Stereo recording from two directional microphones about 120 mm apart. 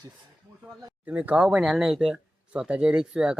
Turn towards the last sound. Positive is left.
turn(degrees=-10)  # may be behind; listen again after turning